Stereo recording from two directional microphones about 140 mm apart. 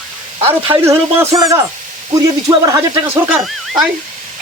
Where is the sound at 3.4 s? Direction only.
Centre (ahead or behind).